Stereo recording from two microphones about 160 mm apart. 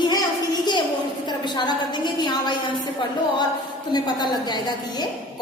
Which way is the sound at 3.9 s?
25° left (ahead or behind).